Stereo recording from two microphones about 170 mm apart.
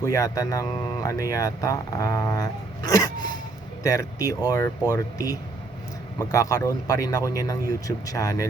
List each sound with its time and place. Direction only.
0.0 s speech: 20° left (ahead or behind)